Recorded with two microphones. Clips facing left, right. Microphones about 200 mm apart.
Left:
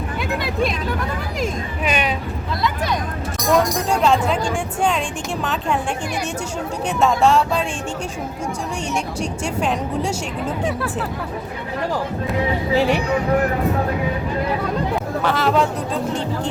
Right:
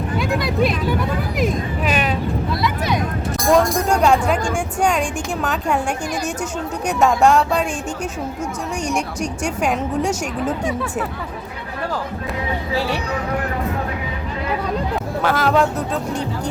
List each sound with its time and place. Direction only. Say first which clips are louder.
0.2 s vehicle: right 3 dB; centre (ahead or behind)
1.4 s speech: right 3 dB; centre (ahead or behind)
4.0 s speech: even; 10° right (ahead or behind)
7.0 s speech: right 1 dB; 10° right (ahead or behind)
9.2 s speech: right 1 dB; 10° right (ahead or behind)
12.7 s speech: left 5 dB; 20° left (ahead or behind)
15.2 s speech: right 2 dB; 5° right (ahead or behind)